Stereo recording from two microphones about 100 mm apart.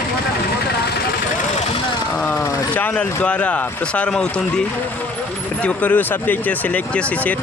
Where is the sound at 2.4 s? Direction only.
35° left (ahead or behind).